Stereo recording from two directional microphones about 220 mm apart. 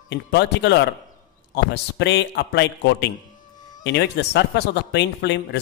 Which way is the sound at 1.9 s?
50° left (ahead or behind).